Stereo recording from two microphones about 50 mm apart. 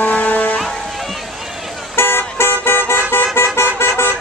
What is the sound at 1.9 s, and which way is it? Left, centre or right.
Vehicle, left.